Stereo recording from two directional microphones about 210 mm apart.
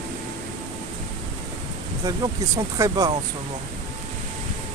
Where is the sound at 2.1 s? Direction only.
15° right (ahead or behind).